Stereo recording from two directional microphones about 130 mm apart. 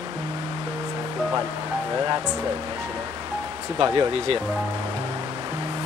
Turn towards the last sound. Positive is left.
turn(degrees=-40)  # may be behind; listen again after turning